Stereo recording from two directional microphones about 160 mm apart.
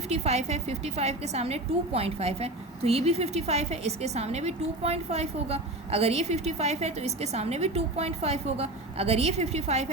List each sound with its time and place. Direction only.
0.1 s a woman's voice: 40° right (ahead or behind)